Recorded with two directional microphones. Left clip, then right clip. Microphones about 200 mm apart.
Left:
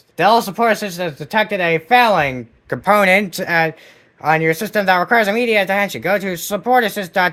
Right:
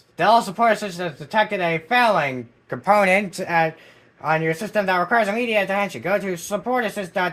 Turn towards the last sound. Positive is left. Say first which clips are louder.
# left 6 dB
turn(degrees=60)  # may be behind; listen again after turning